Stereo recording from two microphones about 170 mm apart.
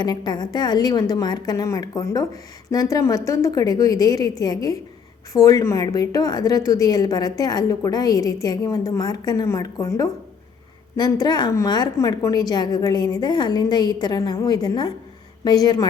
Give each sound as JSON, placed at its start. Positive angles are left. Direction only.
{"t": 0.0, "sound": "a woman's voice", "side_deg": 25}